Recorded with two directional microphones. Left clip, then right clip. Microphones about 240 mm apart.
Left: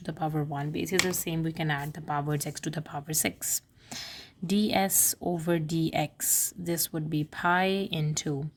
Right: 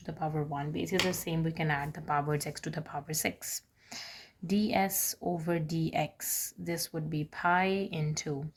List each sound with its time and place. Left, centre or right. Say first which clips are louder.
0.0 s a woman's voice: left 3 dB; left